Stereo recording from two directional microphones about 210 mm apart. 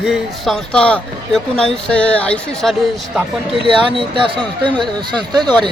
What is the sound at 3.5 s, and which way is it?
Speech, 25° right (ahead or behind).